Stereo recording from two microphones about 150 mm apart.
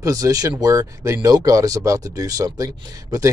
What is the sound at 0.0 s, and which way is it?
Speech, 25° right (ahead or behind).